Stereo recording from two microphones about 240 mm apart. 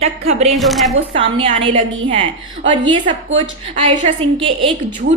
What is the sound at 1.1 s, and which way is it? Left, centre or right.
A woman's voice, right.